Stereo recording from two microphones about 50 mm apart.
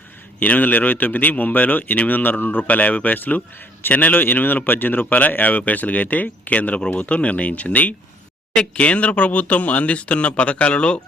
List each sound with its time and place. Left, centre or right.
0.3 s speech: left
2.6 s speech: left